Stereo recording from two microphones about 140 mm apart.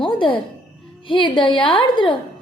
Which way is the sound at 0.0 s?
40° left (ahead or behind).